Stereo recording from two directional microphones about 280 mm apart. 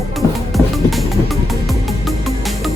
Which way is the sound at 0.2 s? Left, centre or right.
Centre.